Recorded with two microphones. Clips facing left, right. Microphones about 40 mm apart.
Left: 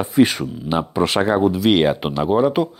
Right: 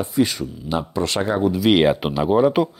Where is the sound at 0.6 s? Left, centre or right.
Left; by 2.7 s centre.